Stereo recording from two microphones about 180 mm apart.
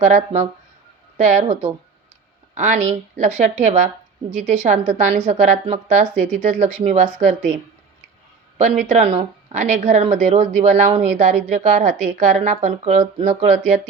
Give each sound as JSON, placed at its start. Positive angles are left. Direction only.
{"t": 0.0, "sound": "a woman's voice", "side_deg": -40}
{"t": 8.8, "sound": "a woman's voice", "side_deg": -40}